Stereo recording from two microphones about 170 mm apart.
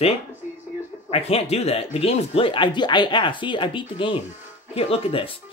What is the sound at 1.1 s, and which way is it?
Speech, 35° left (ahead or behind).